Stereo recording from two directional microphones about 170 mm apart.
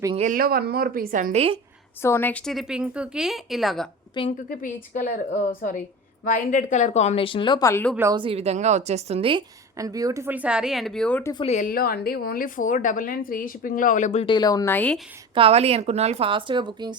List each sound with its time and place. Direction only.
0.2 s a woman's voice: 55° right (ahead or behind); by 1.5 s 40° right (ahead or behind)
2.0 s a woman's voice: 15° left (ahead or behind)
4.4 s a woman's voice: 50° left (ahead or behind); by 7.7 s 30° left (ahead or behind)
7.7 s speech: 10° left (ahead or behind)
8.1 s a woman's voice: 30° right (ahead or behind)
9.7 s speech: 20° right (ahead or behind); by 11.2 s 5° left (ahead or behind)
11.2 s speech: 20° left (ahead or behind)
11.4 s a woman's voice: 45° left (ahead or behind)
11.7 s a woman's voice: 60° left (ahead or behind); by 14.3 s 40° left (ahead or behind)
14.3 s speech: 20° left (ahead or behind)
15.4 s a woman's voice: 35° right (ahead or behind)